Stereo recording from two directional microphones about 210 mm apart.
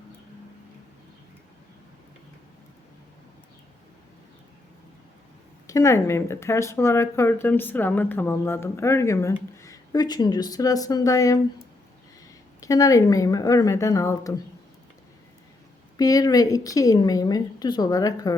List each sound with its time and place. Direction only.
5.6 s speech: 15° left (ahead or behind)
12.5 s speech: 15° left (ahead or behind)
16.0 s speech: 15° left (ahead or behind)